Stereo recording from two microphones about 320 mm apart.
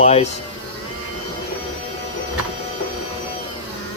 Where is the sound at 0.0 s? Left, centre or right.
Centre.